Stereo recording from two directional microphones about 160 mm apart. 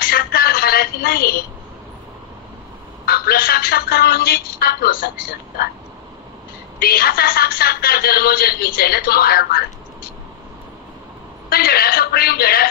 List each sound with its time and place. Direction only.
0.0 s a sound: 70° left (ahead or behind)
3.1 s a woman's voice: 70° left (ahead or behind)
6.8 s a woman's voice: 70° left (ahead or behind)
11.4 s a woman's voice: 70° left (ahead or behind)